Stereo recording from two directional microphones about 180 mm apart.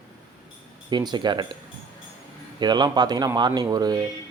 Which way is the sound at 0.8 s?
25° right (ahead or behind).